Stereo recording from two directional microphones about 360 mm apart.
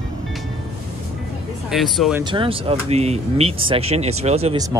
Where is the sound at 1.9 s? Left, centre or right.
Centre.